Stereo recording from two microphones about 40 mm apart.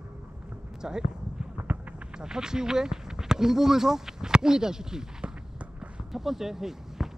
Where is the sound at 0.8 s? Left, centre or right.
Centre.